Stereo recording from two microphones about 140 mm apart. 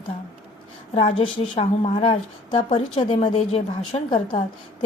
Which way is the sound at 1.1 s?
45° left (ahead or behind).